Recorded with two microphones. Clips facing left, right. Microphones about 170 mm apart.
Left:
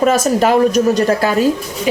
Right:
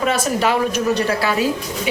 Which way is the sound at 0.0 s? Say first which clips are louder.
Left 6 dB; 45° left (ahead or behind).